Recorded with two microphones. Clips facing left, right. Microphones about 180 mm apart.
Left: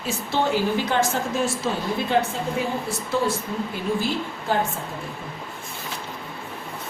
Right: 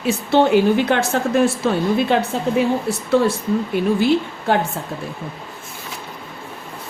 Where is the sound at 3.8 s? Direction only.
65° right (ahead or behind).